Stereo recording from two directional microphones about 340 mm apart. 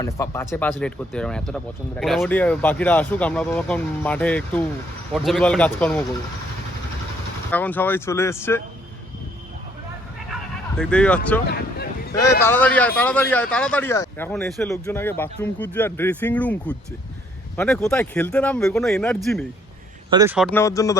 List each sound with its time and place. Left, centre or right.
0.0 s speech: centre
7.5 s speech: centre
10.8 s speech: centre
11.4 s speech: left
12.2 s speech: centre